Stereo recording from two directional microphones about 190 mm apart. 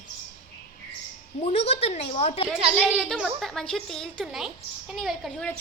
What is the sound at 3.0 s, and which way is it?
A child's voice, centre (ahead or behind).